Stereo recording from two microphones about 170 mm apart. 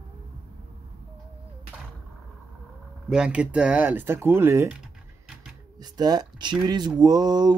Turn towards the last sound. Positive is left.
turn(degrees=-25)  # may be behind; listen again after turning